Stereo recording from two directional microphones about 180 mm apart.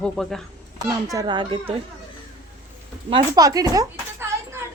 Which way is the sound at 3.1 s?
20° right (ahead or behind).